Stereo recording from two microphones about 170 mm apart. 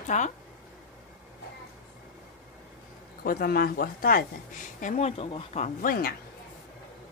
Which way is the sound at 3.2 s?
60° left (ahead or behind).